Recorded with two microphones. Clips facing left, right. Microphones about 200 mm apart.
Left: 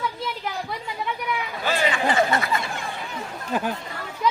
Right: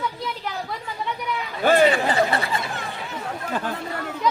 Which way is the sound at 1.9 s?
35° right (ahead or behind).